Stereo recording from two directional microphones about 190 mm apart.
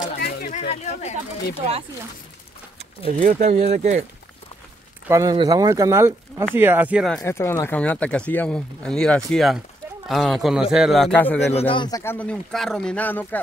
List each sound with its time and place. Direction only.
0.2 s a sound: 55° left (ahead or behind)
0.6 s speech: 35° left (ahead or behind)
3.1 s speech: 40° right (ahead or behind)
5.0 s speech: 20° right (ahead or behind)
7.2 s a man's voice: 15° left (ahead or behind)
11.3 s speech: 30° left (ahead or behind)
12.0 s speech: 10° left (ahead or behind)